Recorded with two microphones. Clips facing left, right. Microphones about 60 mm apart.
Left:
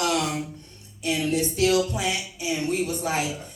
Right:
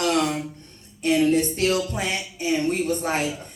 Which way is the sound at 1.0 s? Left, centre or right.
Right.